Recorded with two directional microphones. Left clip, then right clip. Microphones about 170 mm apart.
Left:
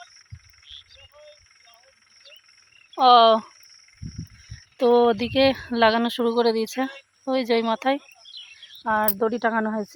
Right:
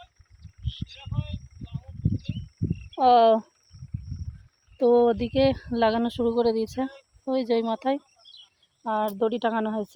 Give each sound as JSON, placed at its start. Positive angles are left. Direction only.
{"t": 3.0, "sound": "speech", "side_deg": -15}
{"t": 4.8, "sound": "speech", "side_deg": 5}
{"t": 9.1, "sound": "speech", "side_deg": 20}